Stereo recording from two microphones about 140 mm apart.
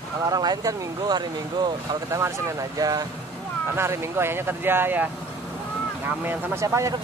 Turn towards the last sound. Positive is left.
turn(degrees=-20)  # may be behind; listen again after turning